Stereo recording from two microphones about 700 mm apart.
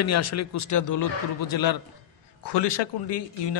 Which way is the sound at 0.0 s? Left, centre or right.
Left.